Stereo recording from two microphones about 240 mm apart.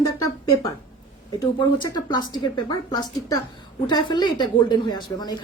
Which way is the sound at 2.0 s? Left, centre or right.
Centre.